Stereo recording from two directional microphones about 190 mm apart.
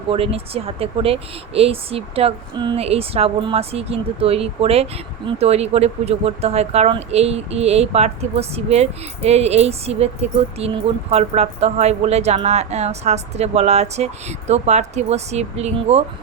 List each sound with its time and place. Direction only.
0.1 s speech: 30° right (ahead or behind)